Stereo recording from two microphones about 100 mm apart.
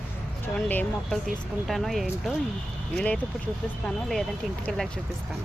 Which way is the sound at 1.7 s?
Centre (ahead or behind).